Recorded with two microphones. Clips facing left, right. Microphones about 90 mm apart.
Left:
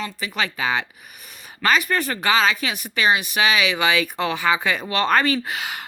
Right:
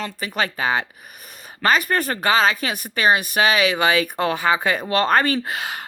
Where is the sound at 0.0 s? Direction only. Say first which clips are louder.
Right 2 dB; 45° right (ahead or behind).